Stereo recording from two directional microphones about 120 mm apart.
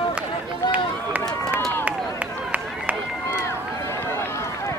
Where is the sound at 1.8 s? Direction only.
10° right (ahead or behind).